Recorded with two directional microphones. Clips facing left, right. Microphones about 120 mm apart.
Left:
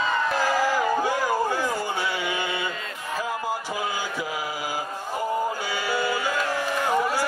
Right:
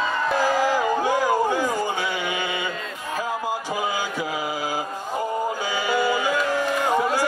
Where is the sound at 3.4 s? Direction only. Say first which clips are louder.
Right 2 dB; 15° right (ahead or behind).